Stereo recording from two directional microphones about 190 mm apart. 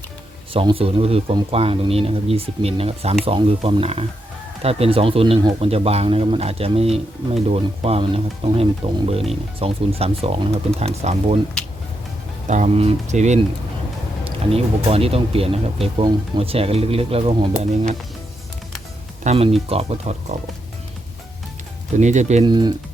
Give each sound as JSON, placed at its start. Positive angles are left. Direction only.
{"t": 0.5, "sound": "speech", "side_deg": -30}
{"t": 11.6, "sound": "music", "side_deg": 5}
{"t": 12.5, "sound": "speech", "side_deg": -40}
{"t": 19.2, "sound": "speech", "side_deg": -35}
{"t": 22.0, "sound": "speech", "side_deg": -40}
{"t": 22.4, "sound": "speech", "side_deg": -20}